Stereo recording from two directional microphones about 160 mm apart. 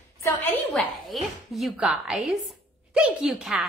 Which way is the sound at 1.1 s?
Centre (ahead or behind).